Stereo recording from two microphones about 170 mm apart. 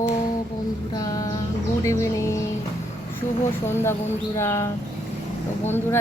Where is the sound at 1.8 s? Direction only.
15° left (ahead or behind).